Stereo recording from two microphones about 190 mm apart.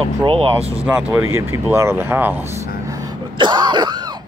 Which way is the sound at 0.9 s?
10° right (ahead or behind).